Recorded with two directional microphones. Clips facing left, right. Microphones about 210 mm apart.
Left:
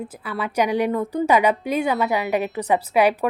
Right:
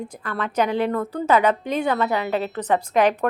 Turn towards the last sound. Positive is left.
turn(degrees=10)  # may be behind; listen again after turning